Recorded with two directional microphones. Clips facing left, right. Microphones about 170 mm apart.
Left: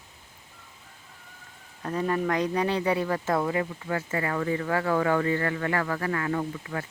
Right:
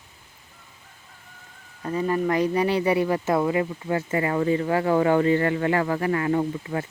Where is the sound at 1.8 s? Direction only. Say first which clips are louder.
Right 3 dB; 5° right (ahead or behind); by 6.8 s 25° right (ahead or behind).